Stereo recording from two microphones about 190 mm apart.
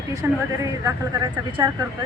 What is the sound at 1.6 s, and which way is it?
Speech, 20° right (ahead or behind).